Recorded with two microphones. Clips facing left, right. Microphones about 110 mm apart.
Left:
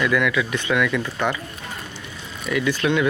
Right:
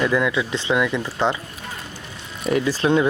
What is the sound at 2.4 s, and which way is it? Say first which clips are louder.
Speech: right 2 dB; 35° right (ahead or behind).